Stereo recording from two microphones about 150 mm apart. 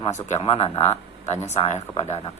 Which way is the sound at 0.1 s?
50° left (ahead or behind).